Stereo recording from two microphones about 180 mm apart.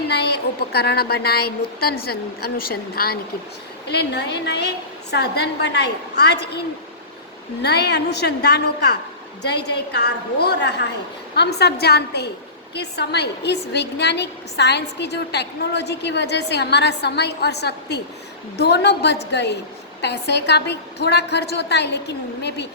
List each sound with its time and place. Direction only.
0.1 s a woman's voice: 65° left (ahead or behind)
7.6 s a woman's voice: 65° left (ahead or behind)